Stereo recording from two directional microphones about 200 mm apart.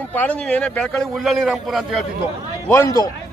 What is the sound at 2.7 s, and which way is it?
Speech, 15° left (ahead or behind).